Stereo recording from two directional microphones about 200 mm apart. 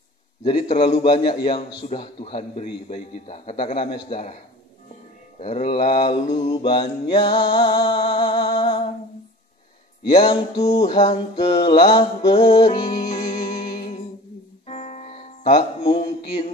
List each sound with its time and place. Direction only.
0.4 s music: 30° left (ahead or behind)
2.2 s a man's voice: 30° left (ahead or behind)
5.4 s a man's voice: 30° left (ahead or behind)
6.3 s music: 25° left (ahead or behind)
10.0 s music: 25° left (ahead or behind)
10.7 s music: 30° left (ahead or behind)
15.8 s a sound: 30° left (ahead or behind)